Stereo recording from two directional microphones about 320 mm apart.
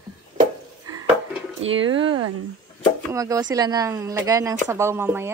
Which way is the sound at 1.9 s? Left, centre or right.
Centre.